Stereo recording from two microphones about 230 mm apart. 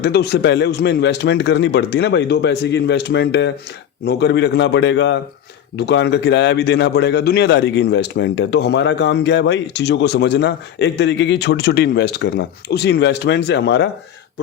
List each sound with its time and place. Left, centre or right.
0.0 s speech: left